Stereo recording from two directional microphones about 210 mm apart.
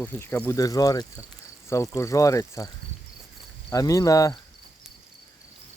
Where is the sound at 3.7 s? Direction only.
15° left (ahead or behind).